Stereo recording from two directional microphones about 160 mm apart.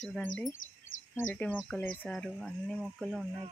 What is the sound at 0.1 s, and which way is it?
Speech, 5° left (ahead or behind).